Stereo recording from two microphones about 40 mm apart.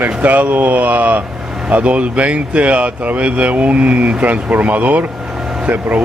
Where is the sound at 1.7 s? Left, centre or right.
Right.